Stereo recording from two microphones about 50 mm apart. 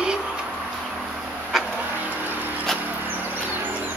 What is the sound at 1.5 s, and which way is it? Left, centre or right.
Vehicle, centre.